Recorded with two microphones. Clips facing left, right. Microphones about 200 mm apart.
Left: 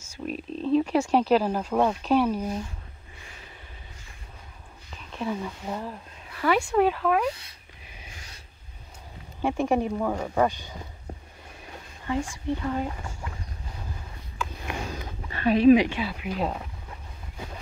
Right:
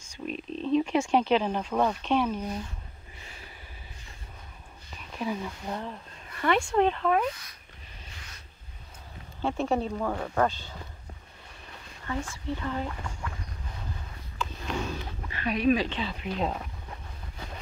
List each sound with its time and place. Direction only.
0.0 s speech: 5° left (ahead or behind)
5.1 s speech: centre (ahead or behind)
9.4 s speech: 15° left (ahead or behind)
12.1 s speech: 15° left (ahead or behind)
15.4 s speech: 30° left (ahead or behind)
15.7 s speech: 15° left (ahead or behind)